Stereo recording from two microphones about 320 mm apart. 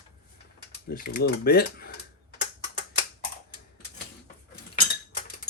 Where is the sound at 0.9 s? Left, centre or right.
Left.